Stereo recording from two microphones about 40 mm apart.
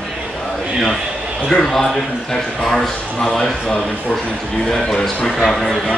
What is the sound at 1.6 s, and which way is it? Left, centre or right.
Speech, centre.